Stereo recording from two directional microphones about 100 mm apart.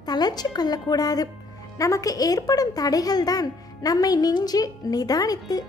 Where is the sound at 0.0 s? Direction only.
45° left (ahead or behind).